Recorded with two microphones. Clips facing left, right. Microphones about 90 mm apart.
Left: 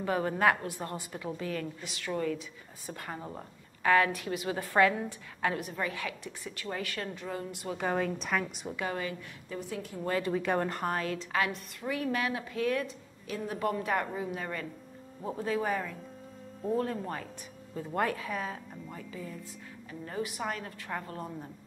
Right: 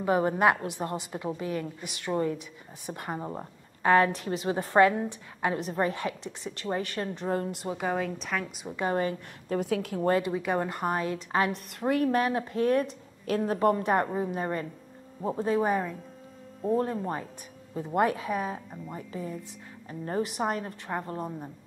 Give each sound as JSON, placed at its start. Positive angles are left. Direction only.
{"t": 0.0, "sound": "a woman's voice", "side_deg": -25}
{"t": 5.7, "sound": "a woman's voice", "side_deg": -35}
{"t": 7.7, "sound": "a woman's voice", "side_deg": -5}
{"t": 8.7, "sound": "a woman's voice", "side_deg": -35}
{"t": 9.5, "sound": "a woman's voice", "side_deg": -70}
{"t": 10.2, "sound": "a woman's voice", "side_deg": -10}
{"t": 11.5, "sound": "a woman's voice", "side_deg": -55}
{"t": 13.6, "sound": "a woman's voice", "side_deg": -35}
{"t": 19.9, "sound": "a woman's voice", "side_deg": -40}
{"t": 20.3, "sound": "a woman's voice", "side_deg": -25}